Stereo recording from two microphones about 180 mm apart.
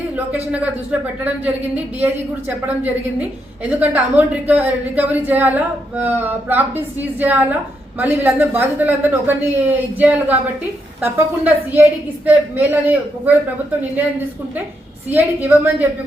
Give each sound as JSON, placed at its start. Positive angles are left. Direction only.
{"t": 0.5, "sound": "speech", "side_deg": -10}
{"t": 15.1, "sound": "speech", "side_deg": -10}